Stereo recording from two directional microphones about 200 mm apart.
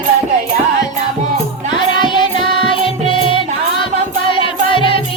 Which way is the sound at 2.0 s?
25° left (ahead or behind).